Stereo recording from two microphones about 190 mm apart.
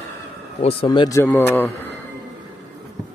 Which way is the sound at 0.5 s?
30° left (ahead or behind).